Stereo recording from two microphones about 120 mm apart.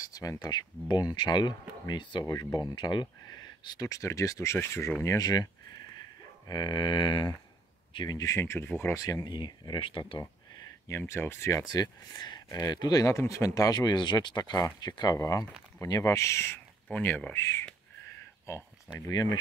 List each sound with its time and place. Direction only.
0.0 s speech: 30° left (ahead or behind)
2.2 s speech: 25° left (ahead or behind)
2.7 s speech: 40° left (ahead or behind)
10.9 s speech: 20° left (ahead or behind)
16.9 s speech: 10° left (ahead or behind)